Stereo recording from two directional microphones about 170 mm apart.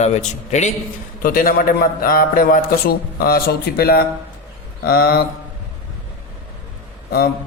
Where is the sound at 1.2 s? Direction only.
55° left (ahead or behind).